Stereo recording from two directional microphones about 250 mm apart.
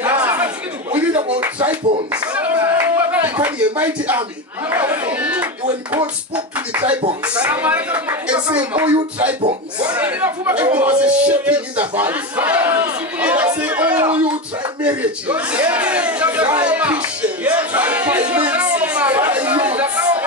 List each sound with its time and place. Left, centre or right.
0.0 s chatter: centre
1.3 s clapping: centre
4.6 s speech: centre
9.4 s speech: right
9.9 s speech: centre
14.9 s a sound: centre